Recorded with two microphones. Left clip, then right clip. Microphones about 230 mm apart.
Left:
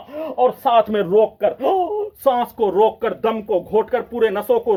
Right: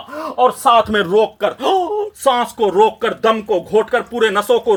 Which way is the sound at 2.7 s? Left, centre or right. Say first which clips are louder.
Right 3 dB; centre.